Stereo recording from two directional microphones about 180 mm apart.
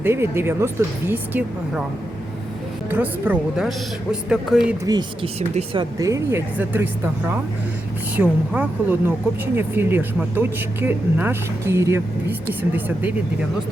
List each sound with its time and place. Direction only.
0.0 s speech: 15° right (ahead or behind)
2.9 s a woman's voice: 10° right (ahead or behind)
4.9 s speech: 25° right (ahead or behind)
5.4 s speech: 35° right (ahead or behind)
5.8 s speech: 20° right (ahead or behind)